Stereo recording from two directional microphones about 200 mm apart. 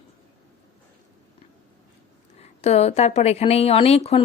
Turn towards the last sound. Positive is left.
turn(degrees=30)  # may be behind; listen again after turning